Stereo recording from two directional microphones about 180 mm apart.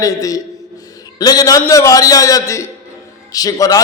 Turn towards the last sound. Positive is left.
turn(degrees=20)  # may be behind; listen again after turning